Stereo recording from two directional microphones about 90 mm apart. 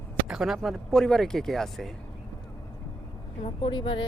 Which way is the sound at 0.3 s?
5° right (ahead or behind).